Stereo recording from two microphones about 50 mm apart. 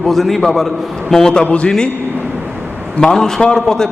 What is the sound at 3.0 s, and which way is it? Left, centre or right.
Speech, centre.